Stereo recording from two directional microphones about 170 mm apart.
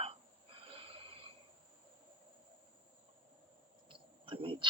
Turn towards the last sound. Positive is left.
turn(degrees=-30)  # may be behind; listen again after turning